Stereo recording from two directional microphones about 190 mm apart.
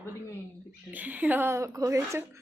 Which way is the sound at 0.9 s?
10° right (ahead or behind).